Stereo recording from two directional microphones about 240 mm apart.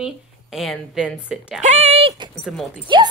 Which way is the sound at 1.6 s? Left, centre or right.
Right.